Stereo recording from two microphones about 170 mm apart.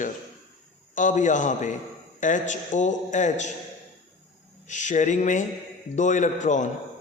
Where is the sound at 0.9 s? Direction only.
45° left (ahead or behind).